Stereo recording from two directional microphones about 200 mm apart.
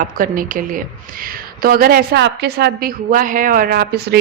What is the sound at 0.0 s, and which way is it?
Speech, 45° right (ahead or behind).